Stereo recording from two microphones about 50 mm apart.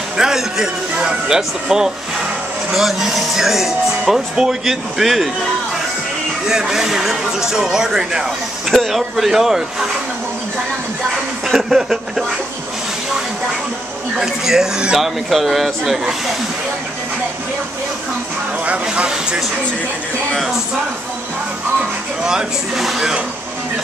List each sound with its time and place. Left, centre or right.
0.2 s music: centre
0.9 s speech: centre
6.4 s speech: centre
11.4 s speech: centre
14.2 s speech: centre
15.0 s speech: centre
18.7 s speech: right
19.0 s speech: centre
22.2 s speech: centre